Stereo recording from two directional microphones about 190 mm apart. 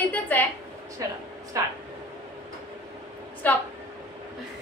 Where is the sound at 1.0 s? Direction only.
20° right (ahead or behind).